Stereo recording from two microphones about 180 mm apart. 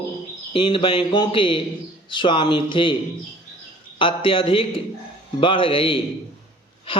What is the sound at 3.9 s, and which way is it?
A man's voice, 30° left (ahead or behind).